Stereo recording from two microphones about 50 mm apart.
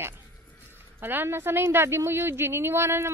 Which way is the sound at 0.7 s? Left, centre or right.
Right.